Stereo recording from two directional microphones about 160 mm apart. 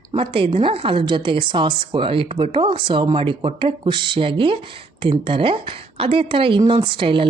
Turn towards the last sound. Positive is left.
turn(degrees=-30)  # may be behind; listen again after turning